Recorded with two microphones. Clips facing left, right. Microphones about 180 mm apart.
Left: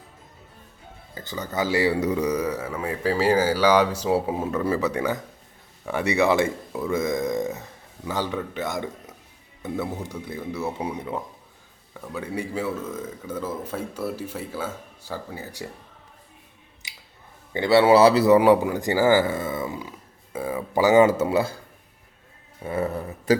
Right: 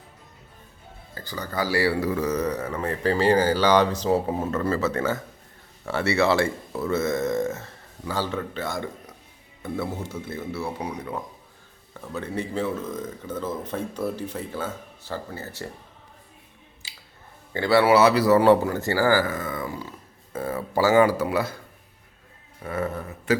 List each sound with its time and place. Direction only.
1.1 s speech: 20° left (ahead or behind)
12.1 s speech: 10° left (ahead or behind)
16.8 s a sound: 20° left (ahead or behind)
17.5 s speech: 20° left (ahead or behind)
18.3 s speech: 10° left (ahead or behind)
22.6 s speech: 30° left (ahead or behind)